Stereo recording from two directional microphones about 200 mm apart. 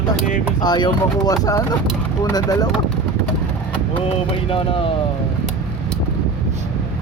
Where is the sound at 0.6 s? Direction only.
20° left (ahead or behind).